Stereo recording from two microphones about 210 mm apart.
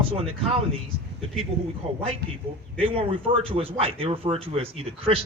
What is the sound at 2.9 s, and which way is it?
Speech, 25° right (ahead or behind).